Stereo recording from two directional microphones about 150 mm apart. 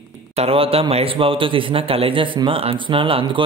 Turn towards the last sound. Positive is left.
turn(degrees=-35)  # may be behind; listen again after turning